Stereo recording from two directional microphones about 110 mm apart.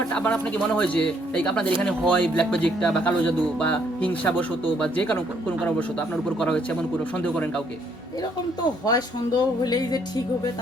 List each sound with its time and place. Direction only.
0.1 s a man's voice: 10° left (ahead or behind)
8.8 s speech: 35° left (ahead or behind)